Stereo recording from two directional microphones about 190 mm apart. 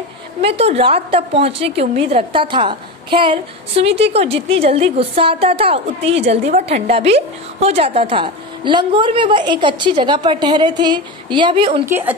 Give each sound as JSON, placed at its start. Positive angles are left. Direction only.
{"t": 0.4, "sound": "a woman's voice", "side_deg": -30}
{"t": 11.8, "sound": "a woman's voice", "side_deg": -10}